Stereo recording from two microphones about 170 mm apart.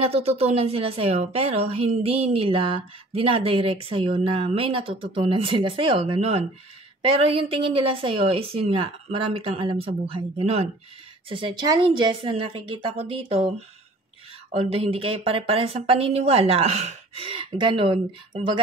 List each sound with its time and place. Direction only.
0.0 s speech: 35° right (ahead or behind)
14.5 s speech: 35° right (ahead or behind)